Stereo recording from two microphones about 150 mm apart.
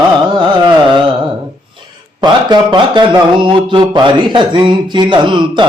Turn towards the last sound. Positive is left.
turn(degrees=-30)  # may be behind; listen again after turning